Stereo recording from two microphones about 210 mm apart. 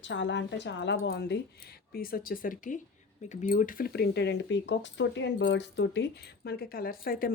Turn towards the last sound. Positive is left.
turn(degrees=45)  # may be behind; listen again after turning